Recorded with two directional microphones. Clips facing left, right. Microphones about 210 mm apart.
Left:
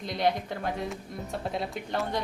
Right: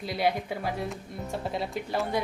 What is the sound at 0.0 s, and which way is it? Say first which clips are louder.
A woman's voice: even; 5° right (ahead or behind).